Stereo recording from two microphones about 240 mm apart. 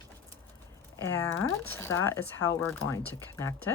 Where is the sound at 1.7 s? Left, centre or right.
Centre.